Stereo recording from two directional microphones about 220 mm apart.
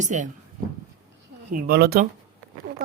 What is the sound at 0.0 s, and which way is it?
Speech, 35° right (ahead or behind).